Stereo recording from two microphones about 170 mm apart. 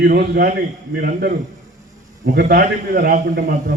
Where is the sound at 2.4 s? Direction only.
60° right (ahead or behind).